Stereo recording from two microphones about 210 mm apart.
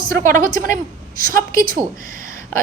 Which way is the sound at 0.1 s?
40° right (ahead or behind).